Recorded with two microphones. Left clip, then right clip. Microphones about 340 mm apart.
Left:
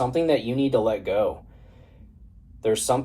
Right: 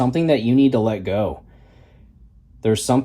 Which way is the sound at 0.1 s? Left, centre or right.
Right.